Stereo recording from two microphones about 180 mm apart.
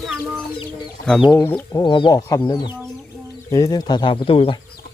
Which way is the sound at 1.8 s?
25° left (ahead or behind).